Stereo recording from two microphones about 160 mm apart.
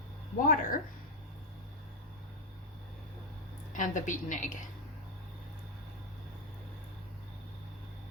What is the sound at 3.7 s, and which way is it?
Speech, 50° left (ahead or behind).